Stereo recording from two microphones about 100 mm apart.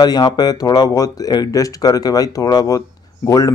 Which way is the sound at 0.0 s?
45° left (ahead or behind).